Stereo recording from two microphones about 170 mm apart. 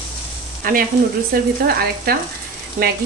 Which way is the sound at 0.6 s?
60° right (ahead or behind).